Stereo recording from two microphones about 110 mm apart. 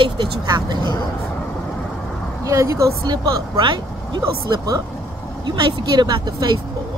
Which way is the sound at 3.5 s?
45° right (ahead or behind).